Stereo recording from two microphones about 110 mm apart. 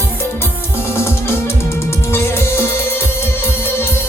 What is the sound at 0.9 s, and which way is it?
Music, 25° left (ahead or behind).